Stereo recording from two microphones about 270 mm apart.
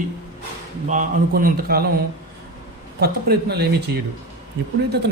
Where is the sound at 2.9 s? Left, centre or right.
Right.